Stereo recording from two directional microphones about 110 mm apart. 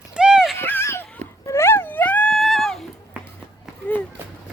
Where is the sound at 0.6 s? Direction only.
20° left (ahead or behind); by 2.8 s 5° left (ahead or behind).